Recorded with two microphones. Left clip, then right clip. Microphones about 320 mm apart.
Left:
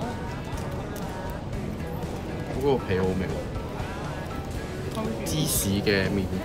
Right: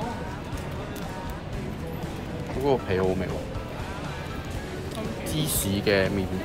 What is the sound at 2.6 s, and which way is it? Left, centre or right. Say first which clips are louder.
Speech: right 1 dB; centre.